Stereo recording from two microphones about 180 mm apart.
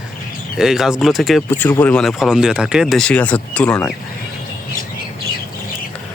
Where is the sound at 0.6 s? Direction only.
5° right (ahead or behind).